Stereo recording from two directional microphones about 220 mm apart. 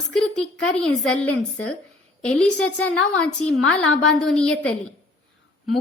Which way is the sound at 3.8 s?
65° left (ahead or behind).